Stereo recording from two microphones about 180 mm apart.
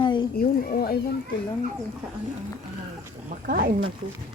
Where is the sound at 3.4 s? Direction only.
50° right (ahead or behind).